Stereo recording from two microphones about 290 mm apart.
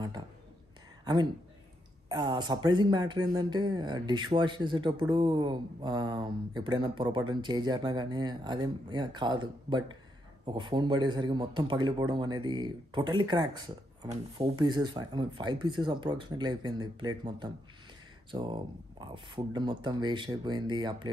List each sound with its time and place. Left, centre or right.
1.0 s a woman's voice: centre